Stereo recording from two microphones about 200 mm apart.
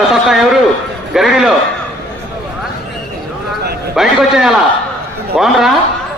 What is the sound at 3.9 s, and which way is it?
Speech, centre (ahead or behind).